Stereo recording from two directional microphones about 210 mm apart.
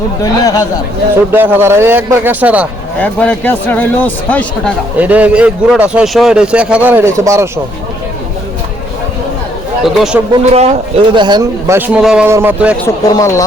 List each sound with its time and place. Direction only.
0.2 s speech: 15° left (ahead or behind)
1.3 s a man's voice: 10° right (ahead or behind)
3.0 s speech: 5° left (ahead or behind)
4.9 s a man's voice: 5° right (ahead or behind)
9.8 s a man's voice: 5° right (ahead or behind)
10.5 s speech: 30° right (ahead or behind)
11.8 s a man's voice: 5° right (ahead or behind)
12.8 s speech: 15° left (ahead or behind)